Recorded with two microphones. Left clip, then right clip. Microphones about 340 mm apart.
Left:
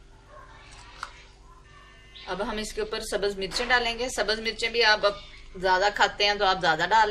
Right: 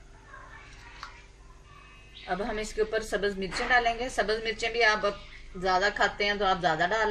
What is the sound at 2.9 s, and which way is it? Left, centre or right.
A woman's voice, left.